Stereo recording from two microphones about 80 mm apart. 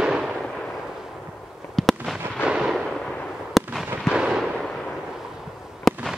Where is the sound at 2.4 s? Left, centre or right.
Centre.